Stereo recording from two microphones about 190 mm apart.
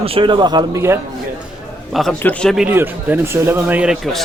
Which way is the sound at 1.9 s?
5° left (ahead or behind).